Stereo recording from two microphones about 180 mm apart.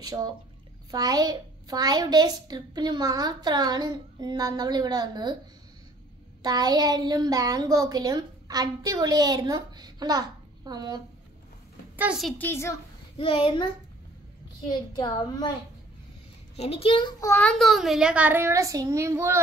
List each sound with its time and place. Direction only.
0.0 s a woman's voice: 20° right (ahead or behind)
6.4 s a woman's voice: 20° right (ahead or behind)
12.0 s a child's voice: 5° right (ahead or behind)
12.4 s a woman's voice: 15° left (ahead or behind)
13.2 s a child's voice: 30° left (ahead or behind)
14.7 s a child's voice: 25° left (ahead or behind)
16.5 s a child's voice: 35° left (ahead or behind); by 19.4 s 15° right (ahead or behind)